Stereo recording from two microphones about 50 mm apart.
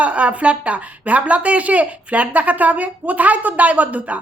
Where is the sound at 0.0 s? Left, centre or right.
Right.